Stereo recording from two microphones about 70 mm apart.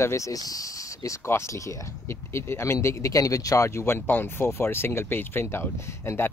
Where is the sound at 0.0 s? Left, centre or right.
Left.